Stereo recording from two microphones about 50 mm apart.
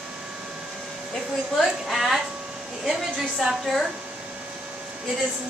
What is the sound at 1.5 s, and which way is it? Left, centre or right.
Speech, centre.